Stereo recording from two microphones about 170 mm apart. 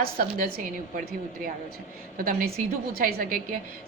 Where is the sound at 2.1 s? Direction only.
55° right (ahead or behind).